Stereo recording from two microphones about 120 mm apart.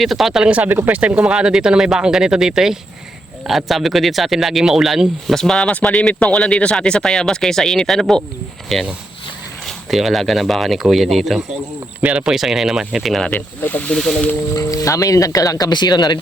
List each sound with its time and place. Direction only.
0.0 s speech: centre (ahead or behind)
14.5 s speech: 30° left (ahead or behind)